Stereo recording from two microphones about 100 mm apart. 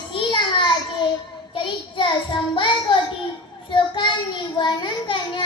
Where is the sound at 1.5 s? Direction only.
55° left (ahead or behind).